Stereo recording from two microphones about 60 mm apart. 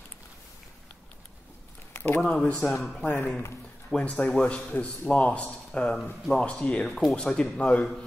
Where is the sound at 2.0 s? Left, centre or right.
Left.